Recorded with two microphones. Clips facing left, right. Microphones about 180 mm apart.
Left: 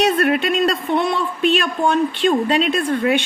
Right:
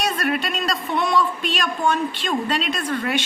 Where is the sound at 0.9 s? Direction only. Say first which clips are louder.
Right 2 dB; 55° left (ahead or behind).